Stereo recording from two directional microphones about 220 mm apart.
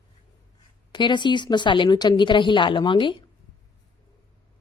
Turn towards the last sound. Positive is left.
turn(degrees=20)  # may be behind; listen again after turning